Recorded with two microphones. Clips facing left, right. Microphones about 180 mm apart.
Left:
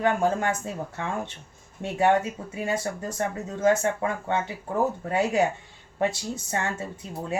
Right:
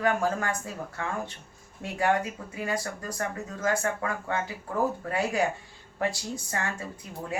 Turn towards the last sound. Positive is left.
turn(degrees=25)  # may be behind; listen again after turning